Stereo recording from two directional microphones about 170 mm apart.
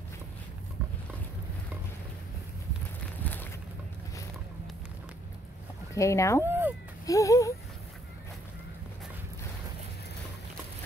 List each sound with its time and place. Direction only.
5.9 s speech: 15° left (ahead or behind)
6.4 s cat: 15° right (ahead or behind)
7.1 s speech: 20° left (ahead or behind)